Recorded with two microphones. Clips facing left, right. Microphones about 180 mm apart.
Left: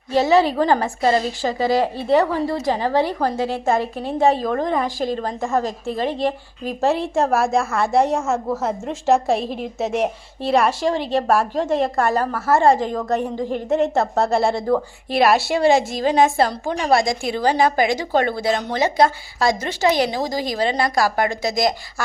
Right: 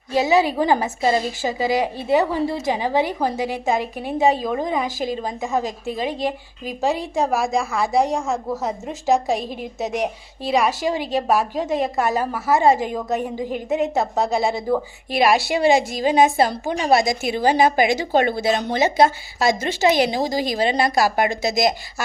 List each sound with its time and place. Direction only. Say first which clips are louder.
0.1 s a woman's voice: left 2 dB; centre (ahead or behind)
0.5 s a woman's voice: left 1 dB; 10° right (ahead or behind)
3.0 s a woman's voice: left 1 dB; 15° right (ahead or behind)
4.2 s a woman's voice: left 1 dB; centre (ahead or behind); by 22.0 s 20° right (ahead or behind)